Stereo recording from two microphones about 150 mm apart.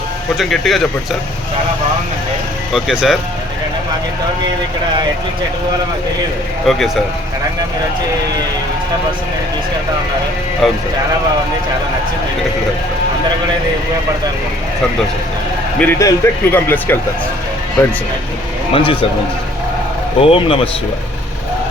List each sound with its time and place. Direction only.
0.3 s speech: centre (ahead or behind)
2.7 s speech: 5° right (ahead or behind)
6.7 s speech: centre (ahead or behind)
10.6 s speech: centre (ahead or behind)
15.8 s a man's voice: 15° left (ahead or behind)
18.7 s speech: 35° left (ahead or behind)
20.2 s speech: 40° left (ahead or behind)